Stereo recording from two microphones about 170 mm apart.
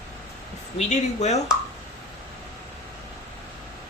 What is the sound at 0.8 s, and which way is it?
Speech, 40° left (ahead or behind).